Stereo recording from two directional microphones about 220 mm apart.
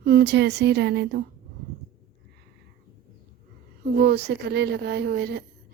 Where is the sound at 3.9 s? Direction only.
45° right (ahead or behind).